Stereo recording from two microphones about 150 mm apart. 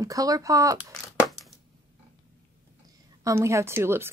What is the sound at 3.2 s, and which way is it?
Speech, 20° right (ahead or behind).